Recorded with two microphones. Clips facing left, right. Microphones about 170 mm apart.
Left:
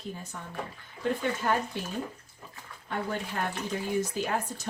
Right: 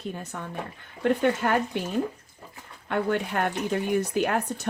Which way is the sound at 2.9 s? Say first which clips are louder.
Right 7 dB; 65° right (ahead or behind).